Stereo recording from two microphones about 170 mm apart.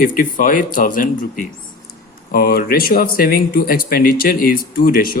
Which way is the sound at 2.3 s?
65° left (ahead or behind).